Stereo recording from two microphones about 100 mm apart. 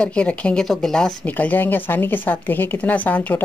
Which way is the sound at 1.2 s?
15° left (ahead or behind).